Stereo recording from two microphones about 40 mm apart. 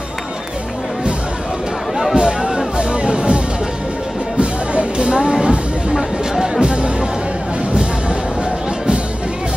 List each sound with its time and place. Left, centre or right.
2.1 s music: centre
4.4 s music: right
5.9 s music: centre
6.6 s music: right